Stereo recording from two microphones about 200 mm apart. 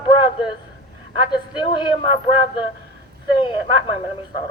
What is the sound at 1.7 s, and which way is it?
Speech, 25° left (ahead or behind).